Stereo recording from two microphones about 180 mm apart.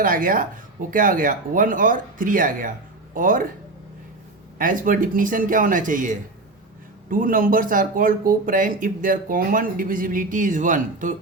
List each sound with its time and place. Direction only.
0.0 s speech: 50° right (ahead or behind)
4.5 s speech: 50° right (ahead or behind)